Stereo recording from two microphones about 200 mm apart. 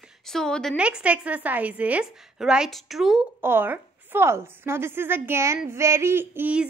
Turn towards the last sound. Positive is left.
turn(degrees=-5)  # may be behind; listen again after turning